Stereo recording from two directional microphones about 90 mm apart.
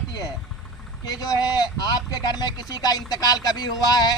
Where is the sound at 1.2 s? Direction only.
45° left (ahead or behind).